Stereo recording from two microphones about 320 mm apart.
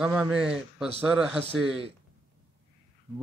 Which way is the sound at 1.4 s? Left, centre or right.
Centre.